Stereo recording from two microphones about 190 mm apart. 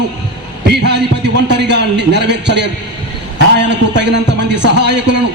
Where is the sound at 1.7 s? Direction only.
65° right (ahead or behind).